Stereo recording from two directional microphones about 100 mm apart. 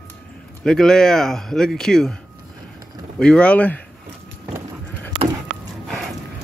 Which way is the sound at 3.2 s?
10° left (ahead or behind).